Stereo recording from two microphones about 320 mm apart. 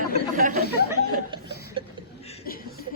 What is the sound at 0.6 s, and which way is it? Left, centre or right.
Speech, left.